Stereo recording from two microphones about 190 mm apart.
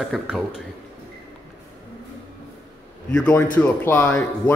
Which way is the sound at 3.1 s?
5° left (ahead or behind).